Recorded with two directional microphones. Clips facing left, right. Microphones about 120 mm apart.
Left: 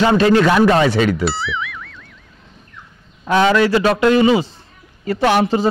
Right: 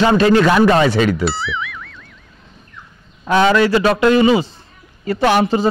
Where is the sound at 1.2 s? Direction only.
Centre (ahead or behind).